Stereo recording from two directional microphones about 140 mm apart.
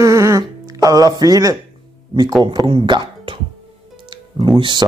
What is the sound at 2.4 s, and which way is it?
Speech, 35° right (ahead or behind).